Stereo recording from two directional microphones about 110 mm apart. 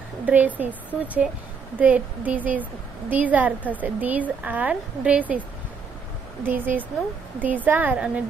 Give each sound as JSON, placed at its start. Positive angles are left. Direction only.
{"t": 0.2, "sound": "a woman's voice", "side_deg": -15}
{"t": 6.4, "sound": "a woman's voice", "side_deg": -15}